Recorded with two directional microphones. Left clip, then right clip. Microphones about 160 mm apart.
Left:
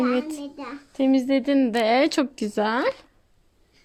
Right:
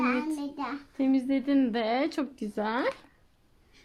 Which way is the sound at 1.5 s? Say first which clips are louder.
Left 7 dB; 40° left (ahead or behind).